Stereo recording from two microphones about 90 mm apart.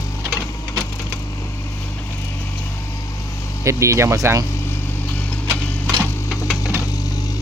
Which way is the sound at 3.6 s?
35° right (ahead or behind).